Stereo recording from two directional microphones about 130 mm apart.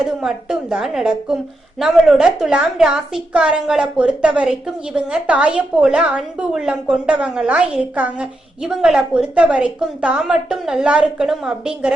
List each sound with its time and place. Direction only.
0.0 s a woman's voice: 5° right (ahead or behind)